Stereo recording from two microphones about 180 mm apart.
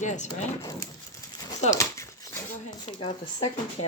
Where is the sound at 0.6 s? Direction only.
20° left (ahead or behind).